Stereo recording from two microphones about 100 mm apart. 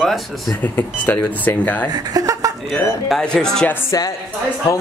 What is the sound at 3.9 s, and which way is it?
Speech, 40° left (ahead or behind).